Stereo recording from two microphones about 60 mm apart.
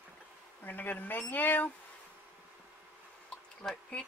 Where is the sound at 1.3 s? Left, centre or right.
Left.